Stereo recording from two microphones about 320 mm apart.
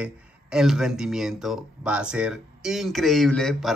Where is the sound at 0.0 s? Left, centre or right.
Centre.